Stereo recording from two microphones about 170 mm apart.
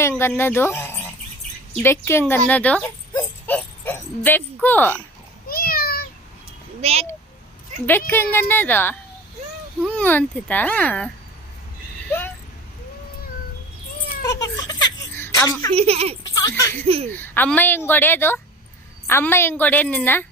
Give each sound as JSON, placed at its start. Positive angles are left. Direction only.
{"t": 0.0, "sound": "a child's voice", "side_deg": 15}
{"t": 2.5, "sound": "a sound", "side_deg": 10}
{"t": 5.5, "sound": "a sound", "side_deg": 60}
{"t": 6.8, "sound": "speech", "side_deg": -35}
{"t": 7.9, "sound": "a child's voice", "side_deg": 15}
{"t": 14.3, "sound": "a sound", "side_deg": 20}
{"t": 15.7, "sound": "speech", "side_deg": -35}
{"t": 16.3, "sound": "speech", "side_deg": 20}
{"t": 16.8, "sound": "speech", "side_deg": -35}
{"t": 17.1, "sound": "a child's voice", "side_deg": 10}